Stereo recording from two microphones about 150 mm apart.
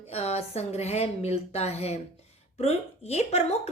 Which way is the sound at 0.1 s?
45° left (ahead or behind).